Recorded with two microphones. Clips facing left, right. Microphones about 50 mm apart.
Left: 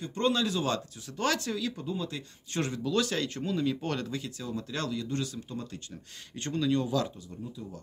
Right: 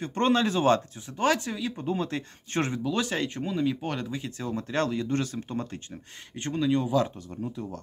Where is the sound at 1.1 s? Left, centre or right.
Right.